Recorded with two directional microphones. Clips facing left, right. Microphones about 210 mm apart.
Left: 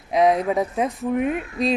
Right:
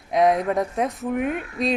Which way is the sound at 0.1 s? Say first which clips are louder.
Left 1 dB; centre (ahead or behind).